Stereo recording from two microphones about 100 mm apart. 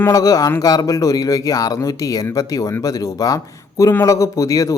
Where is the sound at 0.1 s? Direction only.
35° left (ahead or behind).